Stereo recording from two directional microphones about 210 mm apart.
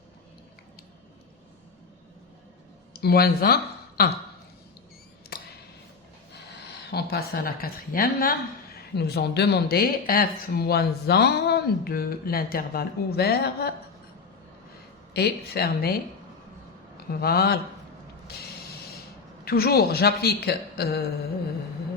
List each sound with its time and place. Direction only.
2.9 s speech: 50° left (ahead or behind)
6.9 s a woman's voice: 50° left (ahead or behind)
15.1 s a woman's voice: 50° left (ahead or behind)
17.1 s a woman's voice: 50° left (ahead or behind)
18.3 s mechanisms: 50° left (ahead or behind)
19.5 s a woman's voice: 50° left (ahead or behind)